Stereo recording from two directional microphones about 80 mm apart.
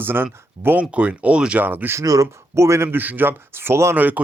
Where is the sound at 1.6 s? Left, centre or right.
Right.